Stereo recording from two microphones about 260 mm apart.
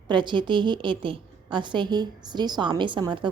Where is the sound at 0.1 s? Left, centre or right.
Centre.